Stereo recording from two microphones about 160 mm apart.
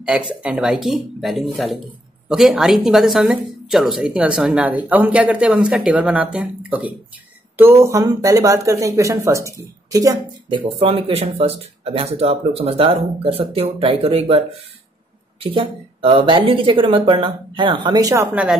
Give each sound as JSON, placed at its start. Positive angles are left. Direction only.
{"t": 0.0, "sound": "a woman's voice", "side_deg": -5}
{"t": 10.8, "sound": "speech", "side_deg": -35}
{"t": 15.4, "sound": "speech", "side_deg": -35}